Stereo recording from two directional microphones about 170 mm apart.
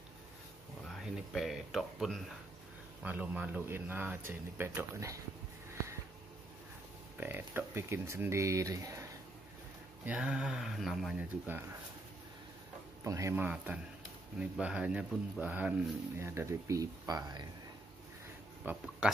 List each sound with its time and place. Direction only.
0.8 s speech: centre (ahead or behind)
7.2 s speech: 10° right (ahead or behind)
10.0 s speech: 5° right (ahead or behind)
13.0 s speech: 15° right (ahead or behind)
18.7 s speech: 5° right (ahead or behind)